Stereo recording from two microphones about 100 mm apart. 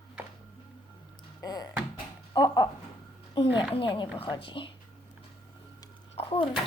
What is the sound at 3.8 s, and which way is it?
Speech, 55° left (ahead or behind).